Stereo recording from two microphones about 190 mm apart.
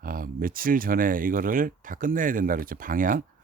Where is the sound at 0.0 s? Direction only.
50° right (ahead or behind).